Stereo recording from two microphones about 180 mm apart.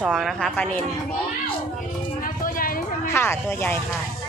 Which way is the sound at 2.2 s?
50° left (ahead or behind).